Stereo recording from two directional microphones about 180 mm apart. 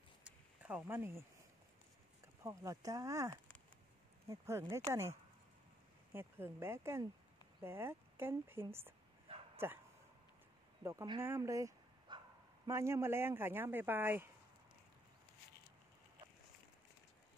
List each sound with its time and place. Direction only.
0.2 s a sound: 10° right (ahead or behind)
2.4 s speech: 20° right (ahead or behind)
6.1 s speech: 15° right (ahead or behind)
10.8 s speech: 15° right (ahead or behind)